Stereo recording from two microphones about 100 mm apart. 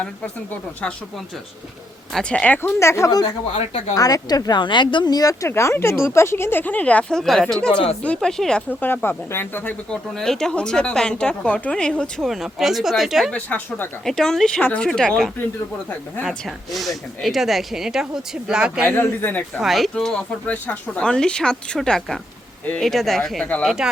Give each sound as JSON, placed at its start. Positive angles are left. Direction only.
{"t": 2.1, "sound": "speech", "side_deg": 10}
{"t": 2.6, "sound": "speech", "side_deg": 25}
{"t": 8.8, "sound": "speech", "side_deg": 20}
{"t": 9.9, "sound": "speech", "side_deg": 5}
{"t": 13.3, "sound": "speech", "side_deg": 20}
{"t": 14.0, "sound": "speech", "side_deg": 5}
{"t": 16.7, "sound": "speech", "side_deg": 0}
{"t": 18.9, "sound": "speech", "side_deg": 20}
{"t": 19.6, "sound": "speech", "side_deg": 0}